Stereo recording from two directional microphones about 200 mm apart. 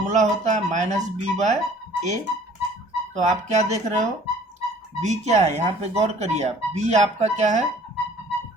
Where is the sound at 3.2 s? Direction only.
35° right (ahead or behind).